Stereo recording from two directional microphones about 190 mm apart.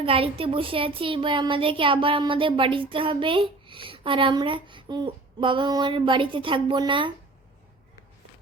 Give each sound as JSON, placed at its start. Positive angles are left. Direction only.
{"t": 0.0, "sound": "a woman's voice", "side_deg": -30}